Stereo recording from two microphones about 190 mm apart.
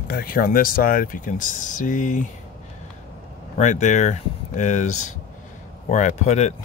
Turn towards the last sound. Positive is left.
turn(degrees=35)  # may be behind; listen again after turning